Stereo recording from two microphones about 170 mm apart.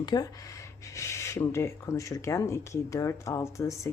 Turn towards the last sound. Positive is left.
turn(degrees=15)  # may be behind; listen again after turning